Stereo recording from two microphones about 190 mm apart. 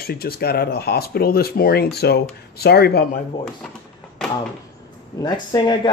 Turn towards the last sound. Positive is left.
turn(degrees=25)  # may be behind; listen again after turning